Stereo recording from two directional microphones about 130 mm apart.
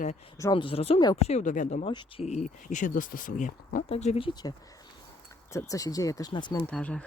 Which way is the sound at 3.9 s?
55° left (ahead or behind).